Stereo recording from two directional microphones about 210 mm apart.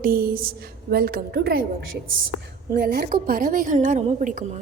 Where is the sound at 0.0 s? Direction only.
45° right (ahead or behind).